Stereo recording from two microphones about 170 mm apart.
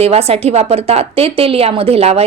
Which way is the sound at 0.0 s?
35° right (ahead or behind).